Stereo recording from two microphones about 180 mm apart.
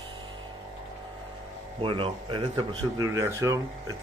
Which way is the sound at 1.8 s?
30° right (ahead or behind).